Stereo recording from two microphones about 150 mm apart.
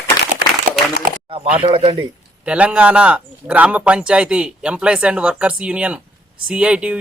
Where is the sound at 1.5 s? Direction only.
40° right (ahead or behind).